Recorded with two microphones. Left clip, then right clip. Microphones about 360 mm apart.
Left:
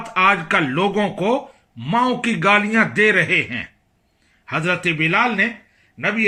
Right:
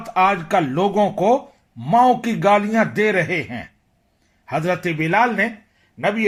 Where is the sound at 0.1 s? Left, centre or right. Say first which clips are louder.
Left 1 dB; centre.